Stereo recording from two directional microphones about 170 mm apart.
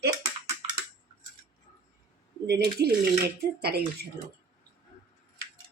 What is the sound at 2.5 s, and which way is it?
Speech, 70° right (ahead or behind).